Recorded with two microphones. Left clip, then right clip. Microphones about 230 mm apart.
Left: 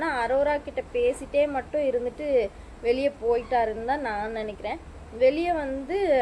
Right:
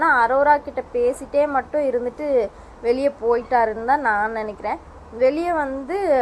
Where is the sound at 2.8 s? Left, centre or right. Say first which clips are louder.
Right 4 dB; centre.